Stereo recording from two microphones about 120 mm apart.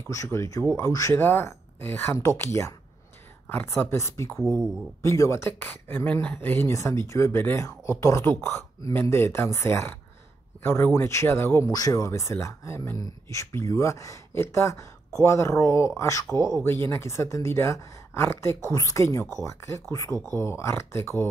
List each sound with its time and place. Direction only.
0.1 s speech: 25° left (ahead or behind)